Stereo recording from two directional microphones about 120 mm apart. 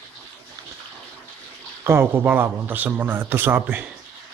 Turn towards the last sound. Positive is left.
turn(degrees=-15)  # may be behind; listen again after turning